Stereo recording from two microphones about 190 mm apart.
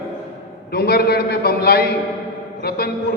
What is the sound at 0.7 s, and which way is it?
A man's voice, 55° left (ahead or behind).